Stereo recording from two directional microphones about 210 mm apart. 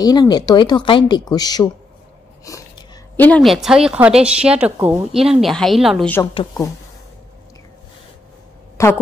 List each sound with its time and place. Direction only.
0.0 s speech: 20° left (ahead or behind); by 6.2 s 5° left (ahead or behind)
6.3 s speech: 15° left (ahead or behind)
8.8 s speech: 15° left (ahead or behind)